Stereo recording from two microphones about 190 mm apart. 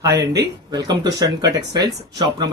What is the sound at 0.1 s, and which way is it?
Speech, 60° right (ahead or behind).